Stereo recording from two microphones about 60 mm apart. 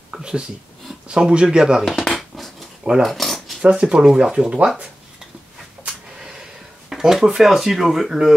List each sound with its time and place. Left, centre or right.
0.1 s speech: centre
1.9 s dishes: centre
3.0 s a sound: centre
3.6 s speech: centre
5.9 s a sound: centre
6.9 s speech: centre